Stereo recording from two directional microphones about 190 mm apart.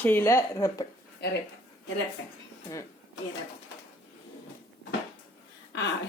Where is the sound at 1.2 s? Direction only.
55° left (ahead or behind).